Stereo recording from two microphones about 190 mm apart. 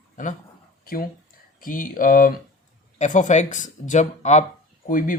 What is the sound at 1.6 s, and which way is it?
Speech, 45° left (ahead or behind).